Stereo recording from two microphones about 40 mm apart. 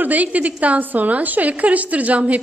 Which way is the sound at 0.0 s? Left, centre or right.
Right.